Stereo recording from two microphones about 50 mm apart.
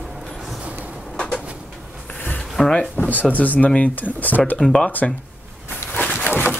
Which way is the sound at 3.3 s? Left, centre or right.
Left.